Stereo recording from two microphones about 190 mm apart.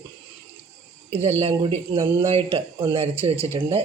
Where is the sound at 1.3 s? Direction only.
30° right (ahead or behind).